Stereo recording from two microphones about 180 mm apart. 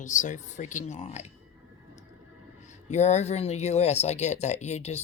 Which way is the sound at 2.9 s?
40° left (ahead or behind).